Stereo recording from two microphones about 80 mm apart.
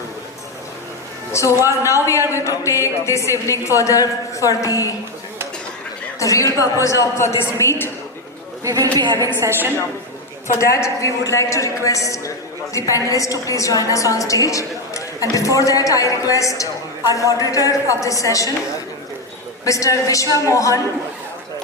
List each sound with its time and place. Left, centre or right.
1.3 s a woman's voice: left
6.1 s a woman's voice: left
8.6 s a woman's voice: right
10.5 s a woman's voice: left
19.6 s a woman's voice: left